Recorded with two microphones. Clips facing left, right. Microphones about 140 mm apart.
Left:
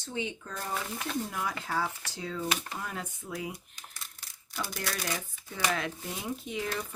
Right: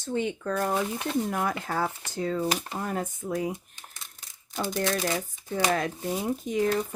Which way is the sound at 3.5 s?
20° right (ahead or behind).